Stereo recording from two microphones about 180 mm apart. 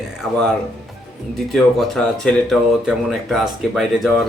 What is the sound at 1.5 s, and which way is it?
Speech, centre (ahead or behind).